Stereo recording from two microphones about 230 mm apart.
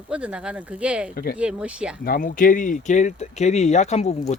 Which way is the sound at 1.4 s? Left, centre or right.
Centre.